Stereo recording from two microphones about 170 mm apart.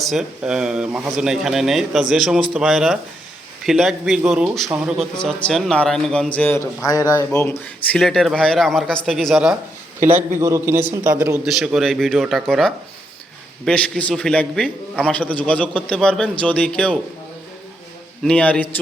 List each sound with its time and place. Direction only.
0.0 s speech: centre (ahead or behind)
6.8 s speech: 20° left (ahead or behind)
7.3 s a man's voice: 10° left (ahead or behind); by 11.3 s 15° right (ahead or behind)
11.4 s a man's voice: centre (ahead or behind)
18.2 s a man's voice: 5° left (ahead or behind)